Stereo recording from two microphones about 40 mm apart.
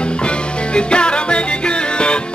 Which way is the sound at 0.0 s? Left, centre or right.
Left.